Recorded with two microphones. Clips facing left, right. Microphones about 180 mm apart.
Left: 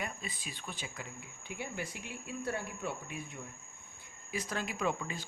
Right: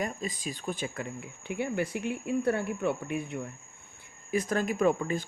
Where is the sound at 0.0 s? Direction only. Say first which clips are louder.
Right 8 dB; 40° right (ahead or behind).